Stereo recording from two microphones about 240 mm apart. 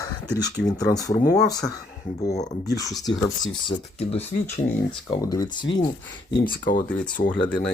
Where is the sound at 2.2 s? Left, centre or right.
Left.